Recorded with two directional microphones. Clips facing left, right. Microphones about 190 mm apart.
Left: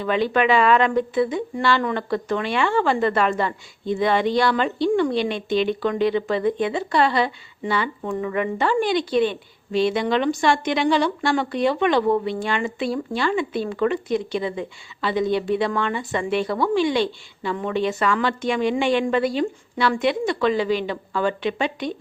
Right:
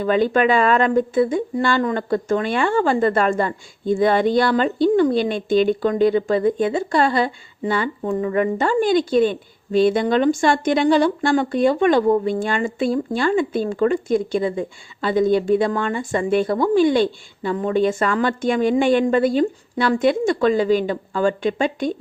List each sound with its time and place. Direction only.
0.0 s a woman's voice: 45° right (ahead or behind)
8.0 s a woman's voice: 35° right (ahead or behind)